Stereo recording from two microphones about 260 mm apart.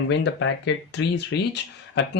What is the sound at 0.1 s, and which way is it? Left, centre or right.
Speech, left.